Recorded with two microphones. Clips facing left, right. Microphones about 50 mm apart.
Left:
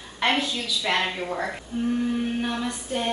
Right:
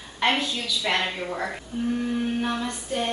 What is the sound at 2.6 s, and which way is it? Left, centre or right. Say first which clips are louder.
Speech: even; centre.